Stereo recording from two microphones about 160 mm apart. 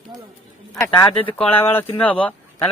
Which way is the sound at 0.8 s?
20° left (ahead or behind).